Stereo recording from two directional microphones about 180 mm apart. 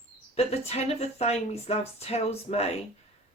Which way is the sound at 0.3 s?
35° left (ahead or behind).